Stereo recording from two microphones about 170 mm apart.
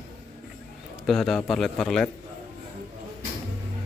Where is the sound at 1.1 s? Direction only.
Centre (ahead or behind).